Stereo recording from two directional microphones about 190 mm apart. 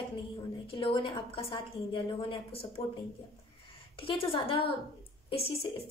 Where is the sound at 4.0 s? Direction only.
30° left (ahead or behind).